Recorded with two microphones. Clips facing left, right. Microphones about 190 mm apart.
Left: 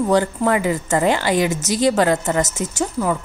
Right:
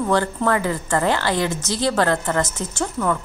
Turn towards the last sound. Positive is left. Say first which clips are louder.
# left 1 dB
turn(degrees=5)  # may be behind; listen again after turning